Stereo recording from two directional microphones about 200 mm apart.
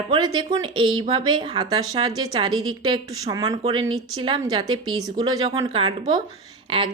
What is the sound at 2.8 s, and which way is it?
Speech, 20° right (ahead or behind).